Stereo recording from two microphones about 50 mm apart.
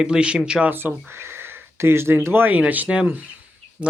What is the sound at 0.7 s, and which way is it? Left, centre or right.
Speech, right.